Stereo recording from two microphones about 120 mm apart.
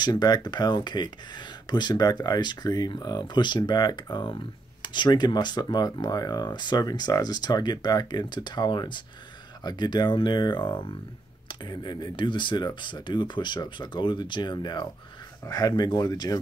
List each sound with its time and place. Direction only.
0.0 s speech: 35° left (ahead or behind)